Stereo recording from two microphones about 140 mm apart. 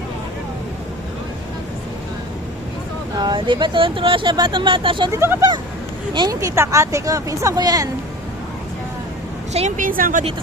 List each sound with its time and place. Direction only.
3.2 s speech: 35° right (ahead or behind)
5.1 s speech: 20° right (ahead or behind)
9.5 s a woman's voice: 55° right (ahead or behind); by 10.2 s 75° right (ahead or behind)